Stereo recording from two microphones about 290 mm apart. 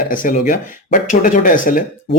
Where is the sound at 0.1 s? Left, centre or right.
Left.